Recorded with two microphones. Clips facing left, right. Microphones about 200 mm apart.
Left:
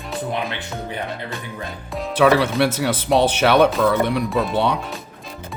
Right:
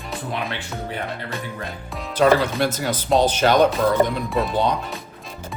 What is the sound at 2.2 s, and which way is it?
Speech, 70° left (ahead or behind).